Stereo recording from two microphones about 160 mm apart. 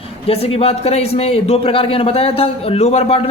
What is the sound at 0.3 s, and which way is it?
A man's voice, 35° left (ahead or behind).